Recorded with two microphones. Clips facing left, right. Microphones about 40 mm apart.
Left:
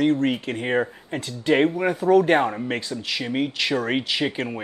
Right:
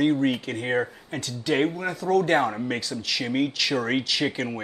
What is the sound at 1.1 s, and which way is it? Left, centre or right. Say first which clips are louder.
Speech: left 4 dB; left.